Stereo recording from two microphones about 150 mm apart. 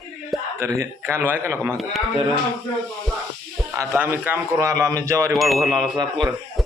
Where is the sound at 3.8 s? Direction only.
15° right (ahead or behind).